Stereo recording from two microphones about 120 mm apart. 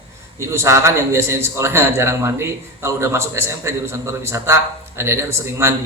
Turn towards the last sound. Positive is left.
turn(degrees=-20)  # may be behind; listen again after turning